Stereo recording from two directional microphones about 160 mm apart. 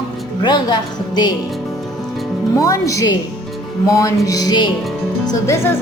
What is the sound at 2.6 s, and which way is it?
A woman's voice, 20° left (ahead or behind).